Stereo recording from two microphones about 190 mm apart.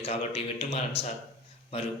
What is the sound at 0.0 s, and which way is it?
A man's voice, 30° left (ahead or behind).